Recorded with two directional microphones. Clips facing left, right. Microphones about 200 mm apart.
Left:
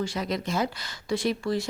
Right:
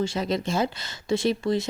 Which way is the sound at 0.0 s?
25° right (ahead or behind).